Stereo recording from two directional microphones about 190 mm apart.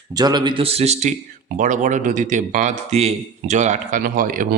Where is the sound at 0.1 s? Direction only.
20° right (ahead or behind).